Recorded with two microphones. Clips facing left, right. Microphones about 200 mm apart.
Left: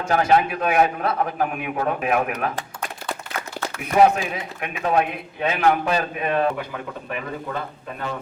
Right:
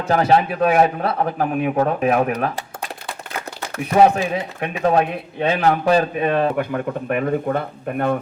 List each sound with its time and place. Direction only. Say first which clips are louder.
0.1 s a man's voice: right 2 dB; 30° right (ahead or behind)
3.9 s a man's voice: right 2 dB; 30° right (ahead or behind)
6.6 s a man's voice: right 9 dB; 55° right (ahead or behind)